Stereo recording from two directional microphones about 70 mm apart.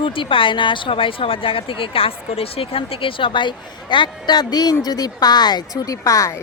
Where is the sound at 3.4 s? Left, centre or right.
Left.